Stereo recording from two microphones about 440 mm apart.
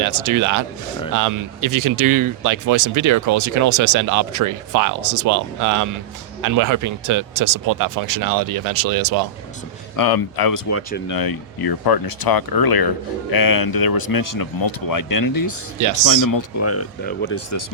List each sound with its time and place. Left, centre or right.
0.0 s speech: right
9.9 s speech: left
10.7 s speech: left
11.2 s speech: left